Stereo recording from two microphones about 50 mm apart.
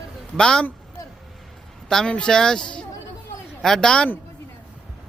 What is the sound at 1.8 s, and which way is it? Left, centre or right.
Speech, centre.